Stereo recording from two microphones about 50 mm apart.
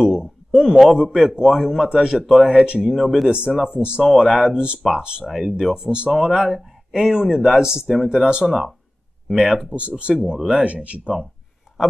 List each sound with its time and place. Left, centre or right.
0.0 s a sound: centre
0.9 s a man's voice: centre
1.5 s a man's voice: centre
3.3 s speech: centre
4.0 s a man's voice: centre
8.5 s a man's voice: centre
9.8 s speech: right